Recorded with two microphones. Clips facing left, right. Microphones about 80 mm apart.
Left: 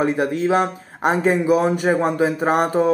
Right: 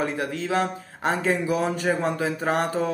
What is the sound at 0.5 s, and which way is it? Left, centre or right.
Speech, centre.